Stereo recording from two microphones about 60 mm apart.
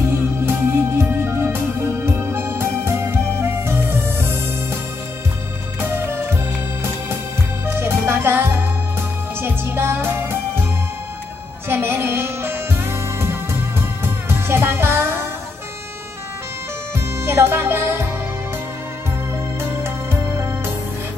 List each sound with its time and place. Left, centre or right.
0.5 s music: right
5.8 s music: right
11.7 s music: right
17.2 s music: right
19.6 s music: right